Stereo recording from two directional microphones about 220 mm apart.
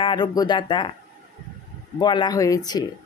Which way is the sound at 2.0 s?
20° left (ahead or behind).